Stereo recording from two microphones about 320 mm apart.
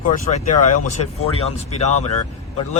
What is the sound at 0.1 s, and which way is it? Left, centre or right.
Speech, left.